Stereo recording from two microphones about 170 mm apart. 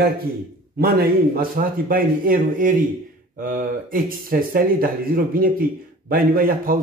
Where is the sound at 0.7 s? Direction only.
65° right (ahead or behind).